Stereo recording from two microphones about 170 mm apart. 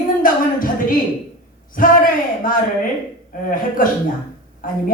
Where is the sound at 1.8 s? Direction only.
55° left (ahead or behind).